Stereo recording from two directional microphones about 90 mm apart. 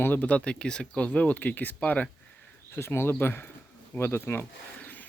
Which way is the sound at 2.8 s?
30° left (ahead or behind).